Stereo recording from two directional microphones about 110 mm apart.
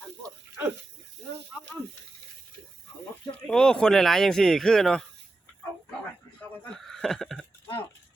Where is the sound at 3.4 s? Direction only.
10° left (ahead or behind).